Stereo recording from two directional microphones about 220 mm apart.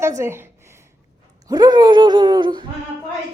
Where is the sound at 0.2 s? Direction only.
10° right (ahead or behind).